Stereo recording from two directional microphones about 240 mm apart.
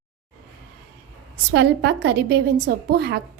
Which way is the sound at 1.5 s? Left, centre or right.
Right.